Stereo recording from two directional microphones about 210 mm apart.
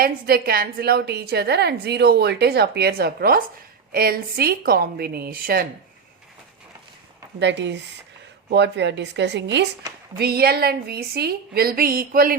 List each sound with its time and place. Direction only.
0.0 s a woman's voice: 45° right (ahead or behind)
7.3 s a woman's voice: 55° right (ahead or behind)